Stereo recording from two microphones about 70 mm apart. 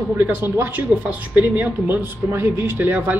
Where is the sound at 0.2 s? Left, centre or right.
Right.